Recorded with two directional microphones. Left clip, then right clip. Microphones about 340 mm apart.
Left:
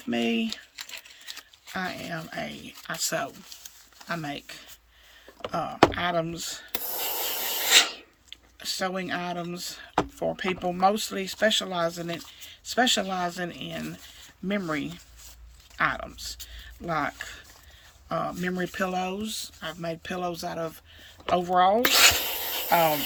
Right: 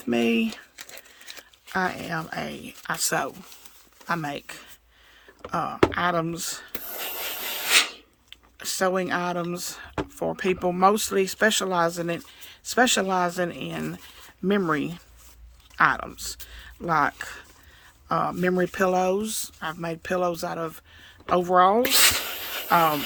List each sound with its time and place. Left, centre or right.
0.1 s speech: centre
1.7 s speech: centre
7.6 s a sound: centre
10.8 s speech: centre
21.8 s a sound: centre
22.7 s speech: centre